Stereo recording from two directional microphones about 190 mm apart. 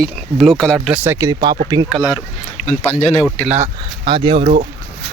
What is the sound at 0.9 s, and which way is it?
Speech, 10° right (ahead or behind).